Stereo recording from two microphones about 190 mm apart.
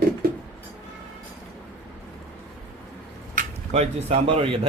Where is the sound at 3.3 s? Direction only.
40° right (ahead or behind).